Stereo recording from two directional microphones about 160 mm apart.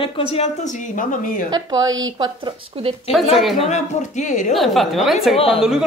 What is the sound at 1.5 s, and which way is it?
A woman's voice, 25° right (ahead or behind).